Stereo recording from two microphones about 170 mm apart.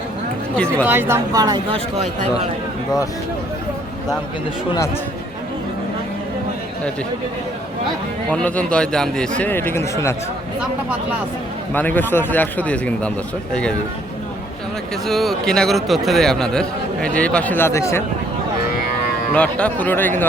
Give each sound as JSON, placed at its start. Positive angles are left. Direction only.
{"t": 0.5, "sound": "a man's voice", "side_deg": 5}
{"t": 0.9, "sound": "speech", "side_deg": -15}
{"t": 8.3, "sound": "a man's voice", "side_deg": 10}
{"t": 11.7, "sound": "a man's voice", "side_deg": 10}
{"t": 15.0, "sound": "a man's voice", "side_deg": 0}
{"t": 18.7, "sound": "cattle", "side_deg": 60}
{"t": 19.3, "sound": "a man's voice", "side_deg": 5}